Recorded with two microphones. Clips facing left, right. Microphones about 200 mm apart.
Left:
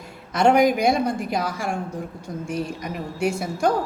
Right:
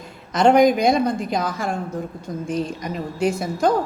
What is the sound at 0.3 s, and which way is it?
A woman's voice, 10° left (ahead or behind).